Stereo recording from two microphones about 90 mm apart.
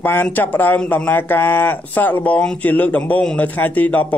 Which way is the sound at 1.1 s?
20° left (ahead or behind).